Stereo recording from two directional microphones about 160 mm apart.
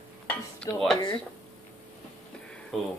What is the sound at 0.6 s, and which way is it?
Dishes, 5° left (ahead or behind).